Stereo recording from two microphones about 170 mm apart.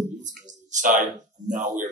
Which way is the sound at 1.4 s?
45° right (ahead or behind).